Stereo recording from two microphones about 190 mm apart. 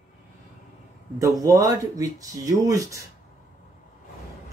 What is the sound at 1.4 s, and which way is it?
Speech, 20° right (ahead or behind).